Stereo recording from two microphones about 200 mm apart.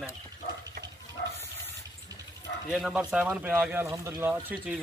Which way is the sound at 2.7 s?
Centre (ahead or behind).